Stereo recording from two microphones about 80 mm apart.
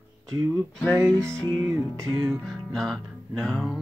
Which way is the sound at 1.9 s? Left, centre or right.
Right.